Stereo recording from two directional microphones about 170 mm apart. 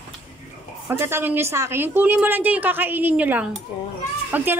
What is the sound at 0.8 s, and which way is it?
A woman's voice, 15° right (ahead or behind).